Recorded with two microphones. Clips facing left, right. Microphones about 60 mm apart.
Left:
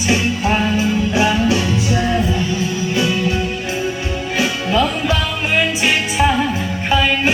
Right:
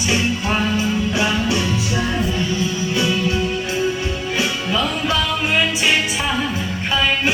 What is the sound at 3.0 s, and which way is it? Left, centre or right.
Music, left.